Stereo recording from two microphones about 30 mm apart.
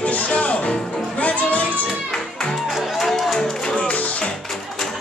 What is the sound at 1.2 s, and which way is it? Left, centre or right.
Music, left.